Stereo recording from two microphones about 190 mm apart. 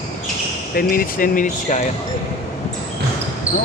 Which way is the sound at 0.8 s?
45° left (ahead or behind).